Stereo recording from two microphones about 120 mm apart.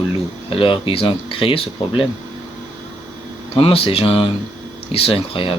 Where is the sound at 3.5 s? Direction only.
50° left (ahead or behind).